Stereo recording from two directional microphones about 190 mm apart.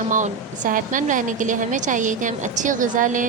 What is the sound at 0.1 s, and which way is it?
A woman's voice, 40° right (ahead or behind).